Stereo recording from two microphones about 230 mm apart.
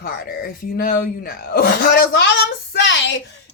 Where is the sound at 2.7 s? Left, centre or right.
Left.